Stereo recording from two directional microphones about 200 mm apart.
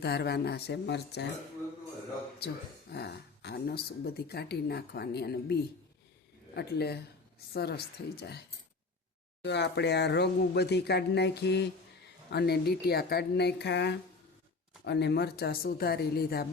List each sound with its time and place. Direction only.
0.0 s speech: 55° left (ahead or behind)
2.9 s speech: 55° left (ahead or behind)
9.4 s speech: 60° left (ahead or behind)